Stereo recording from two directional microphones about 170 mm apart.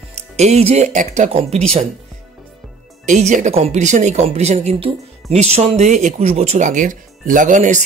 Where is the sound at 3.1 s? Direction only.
45° right (ahead or behind).